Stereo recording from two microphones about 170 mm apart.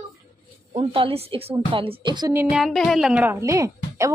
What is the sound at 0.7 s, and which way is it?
A woman's voice, 35° right (ahead or behind).